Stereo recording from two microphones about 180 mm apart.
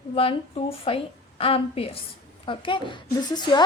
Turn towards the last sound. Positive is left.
turn(degrees=25)  # may be behind; listen again after turning